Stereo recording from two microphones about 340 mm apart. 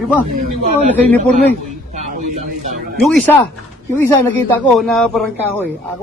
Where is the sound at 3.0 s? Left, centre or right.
Centre.